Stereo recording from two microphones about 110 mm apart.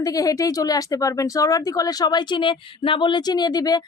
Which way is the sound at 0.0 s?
30° left (ahead or behind).